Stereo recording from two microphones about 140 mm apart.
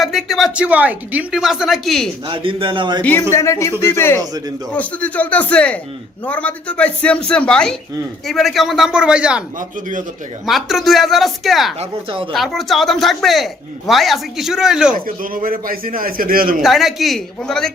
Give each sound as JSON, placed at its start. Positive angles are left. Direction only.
{"t": 0.0, "sound": "speech", "side_deg": 0}
{"t": 2.2, "sound": "a man's voice", "side_deg": -40}
{"t": 3.0, "sound": "speech", "side_deg": 15}
{"t": 10.4, "sound": "speech", "side_deg": 0}
{"t": 11.8, "sound": "a man's voice", "side_deg": -40}
{"t": 12.3, "sound": "speech", "side_deg": 0}
{"t": 14.9, "sound": "a man's voice", "side_deg": -90}
{"t": 16.6, "sound": "speech", "side_deg": 0}